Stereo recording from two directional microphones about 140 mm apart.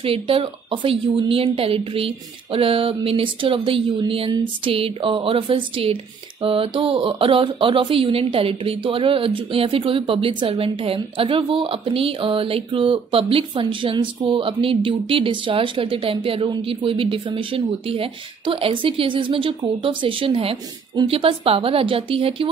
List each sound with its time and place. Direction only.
0.0 s speech: 40° right (ahead or behind)